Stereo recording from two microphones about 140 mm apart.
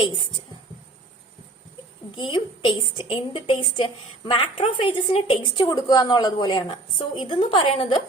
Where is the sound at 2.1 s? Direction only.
35° left (ahead or behind).